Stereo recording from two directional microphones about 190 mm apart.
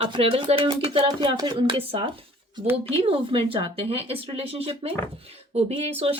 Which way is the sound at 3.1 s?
25° right (ahead or behind).